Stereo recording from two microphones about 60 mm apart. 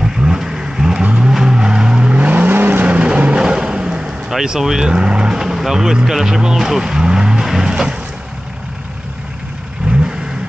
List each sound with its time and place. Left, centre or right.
0.0 s vehicle: centre
4.3 s speech: centre